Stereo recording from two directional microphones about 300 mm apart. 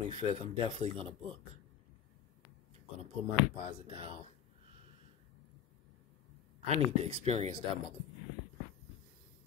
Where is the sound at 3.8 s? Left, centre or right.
Centre.